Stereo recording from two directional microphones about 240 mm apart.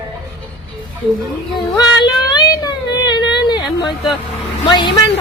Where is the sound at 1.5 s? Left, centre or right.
Centre.